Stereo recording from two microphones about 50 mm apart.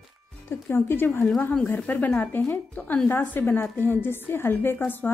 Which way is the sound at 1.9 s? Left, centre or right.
Left.